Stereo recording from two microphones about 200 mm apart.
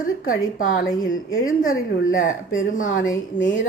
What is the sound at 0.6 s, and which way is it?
A woman's voice, 40° left (ahead or behind).